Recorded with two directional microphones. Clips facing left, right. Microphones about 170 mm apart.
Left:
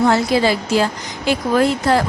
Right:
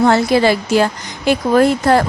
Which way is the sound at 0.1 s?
60° right (ahead or behind).